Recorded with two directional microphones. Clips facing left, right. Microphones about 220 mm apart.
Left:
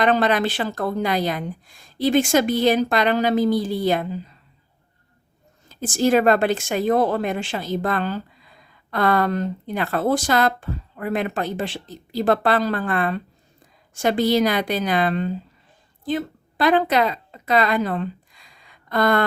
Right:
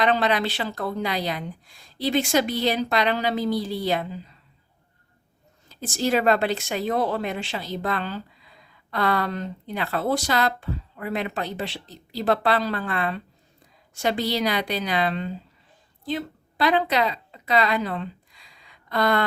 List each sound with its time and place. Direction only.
0.0 s a woman's voice: 50° left (ahead or behind)
5.6 s a woman's voice: 50° left (ahead or behind)